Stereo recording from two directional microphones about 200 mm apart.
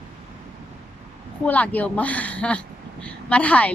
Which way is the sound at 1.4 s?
5° left (ahead or behind).